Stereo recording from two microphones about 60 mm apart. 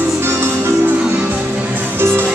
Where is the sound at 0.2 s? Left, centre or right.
Right.